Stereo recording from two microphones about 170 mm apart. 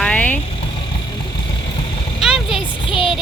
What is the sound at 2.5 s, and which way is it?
Speech, 30° left (ahead or behind).